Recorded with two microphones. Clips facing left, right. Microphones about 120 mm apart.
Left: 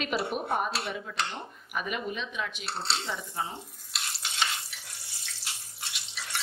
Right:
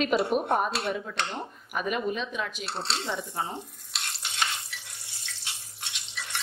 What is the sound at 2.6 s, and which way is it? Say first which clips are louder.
Speech: right 1 dB; centre (ahead or behind).